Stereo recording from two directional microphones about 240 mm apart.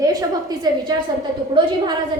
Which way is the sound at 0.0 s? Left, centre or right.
Centre.